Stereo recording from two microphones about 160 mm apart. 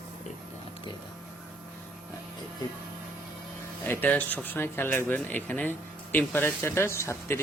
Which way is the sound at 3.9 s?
10° left (ahead or behind).